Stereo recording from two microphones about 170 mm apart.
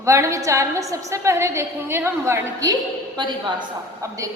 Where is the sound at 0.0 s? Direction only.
15° right (ahead or behind).